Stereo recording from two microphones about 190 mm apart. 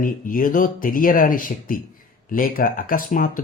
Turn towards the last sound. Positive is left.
turn(degrees=50)  # may be behind; listen again after turning